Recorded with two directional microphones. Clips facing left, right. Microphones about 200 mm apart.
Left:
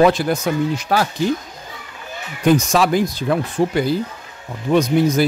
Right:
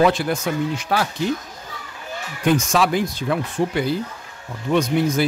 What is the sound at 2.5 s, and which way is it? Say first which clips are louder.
Speech: left 3 dB; 40° left (ahead or behind).